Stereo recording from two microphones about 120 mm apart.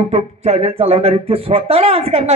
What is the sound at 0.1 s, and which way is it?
Speech, 55° right (ahead or behind).